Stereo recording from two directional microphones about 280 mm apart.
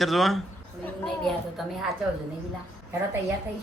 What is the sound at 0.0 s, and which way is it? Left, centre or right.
Speech, centre.